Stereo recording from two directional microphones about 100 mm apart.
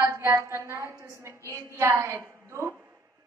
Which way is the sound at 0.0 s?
30° right (ahead or behind).